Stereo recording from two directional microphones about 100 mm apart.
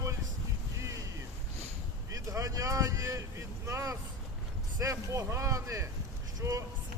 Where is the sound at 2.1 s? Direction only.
35° right (ahead or behind).